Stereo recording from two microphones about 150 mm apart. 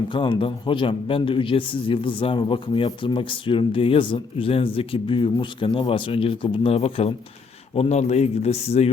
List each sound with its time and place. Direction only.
0.1 s speech: 35° left (ahead or behind)